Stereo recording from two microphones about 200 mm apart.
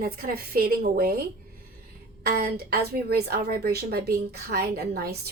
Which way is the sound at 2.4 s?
50° right (ahead or behind).